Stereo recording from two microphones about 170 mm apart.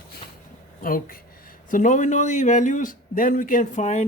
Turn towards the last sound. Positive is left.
turn(degrees=45)  # may be behind; listen again after turning